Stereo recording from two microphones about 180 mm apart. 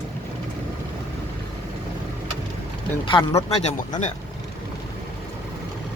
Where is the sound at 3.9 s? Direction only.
40° left (ahead or behind).